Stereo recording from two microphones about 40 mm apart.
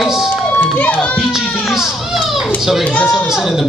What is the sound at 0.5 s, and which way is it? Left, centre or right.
Speech, left.